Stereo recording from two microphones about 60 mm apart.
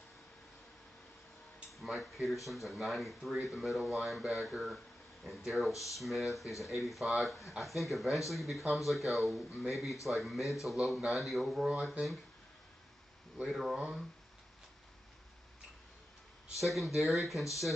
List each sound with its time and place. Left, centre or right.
1.7 s speech: centre
5.7 s speech: left
5.9 s speech: centre
13.4 s speech: centre
16.6 s speech: centre